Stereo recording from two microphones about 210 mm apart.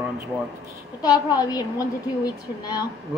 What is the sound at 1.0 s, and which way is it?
Speech, 20° left (ahead or behind).